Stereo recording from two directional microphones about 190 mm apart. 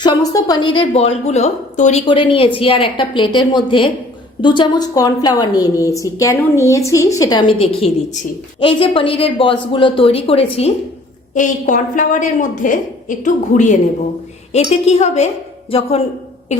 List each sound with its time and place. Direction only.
0.0 s a woman's voice: 20° left (ahead or behind)
11.3 s a woman's voice: 40° left (ahead or behind)
16.5 s a woman's voice: 40° left (ahead or behind)